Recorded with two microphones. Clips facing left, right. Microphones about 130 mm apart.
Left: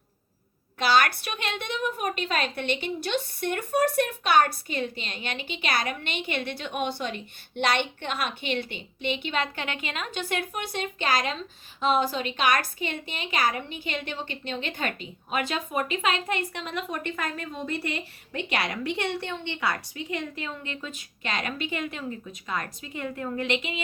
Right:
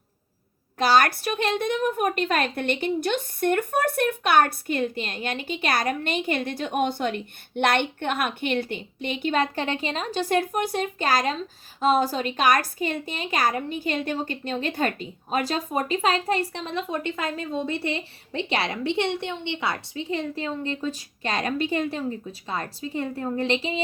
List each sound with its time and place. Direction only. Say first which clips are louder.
0.8 s a woman's voice: right 3 dB; 40° right (ahead or behind)